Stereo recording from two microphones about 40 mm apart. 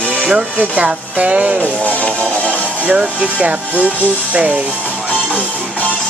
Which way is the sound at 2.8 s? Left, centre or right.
Right.